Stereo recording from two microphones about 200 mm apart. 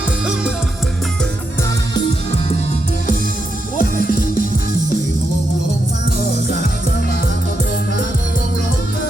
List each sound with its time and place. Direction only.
3.8 s music: 45° left (ahead or behind)